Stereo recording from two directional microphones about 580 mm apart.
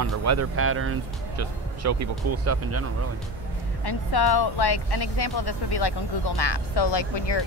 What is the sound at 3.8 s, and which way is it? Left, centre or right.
Speech, left.